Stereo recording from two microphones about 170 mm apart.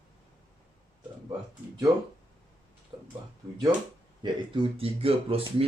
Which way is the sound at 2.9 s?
25° right (ahead or behind).